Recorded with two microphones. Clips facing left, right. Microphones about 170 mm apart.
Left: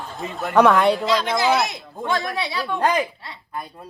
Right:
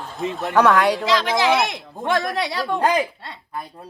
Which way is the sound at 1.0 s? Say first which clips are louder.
Right 1 dB; 90° right.